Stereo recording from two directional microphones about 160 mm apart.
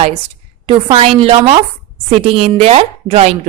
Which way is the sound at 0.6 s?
35° right (ahead or behind).